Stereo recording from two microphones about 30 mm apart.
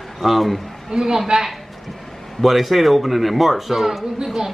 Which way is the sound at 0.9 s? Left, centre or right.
Centre.